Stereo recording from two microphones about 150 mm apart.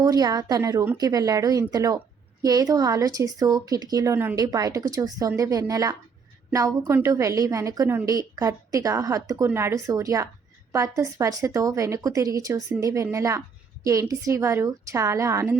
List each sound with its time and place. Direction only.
0.0 s speech: 25° right (ahead or behind)